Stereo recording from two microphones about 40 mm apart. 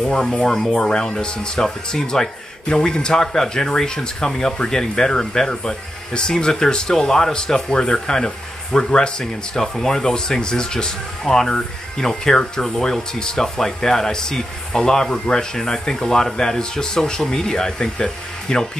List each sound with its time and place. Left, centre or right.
0.0 s speech: centre